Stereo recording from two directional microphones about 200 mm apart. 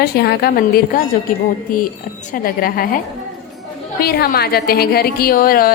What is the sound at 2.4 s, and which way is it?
Speech, 45° left (ahead or behind).